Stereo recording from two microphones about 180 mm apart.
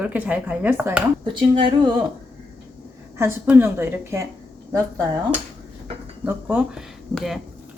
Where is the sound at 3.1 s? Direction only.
15° right (ahead or behind).